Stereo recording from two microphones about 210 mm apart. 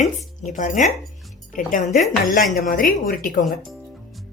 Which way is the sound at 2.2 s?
40° left (ahead or behind).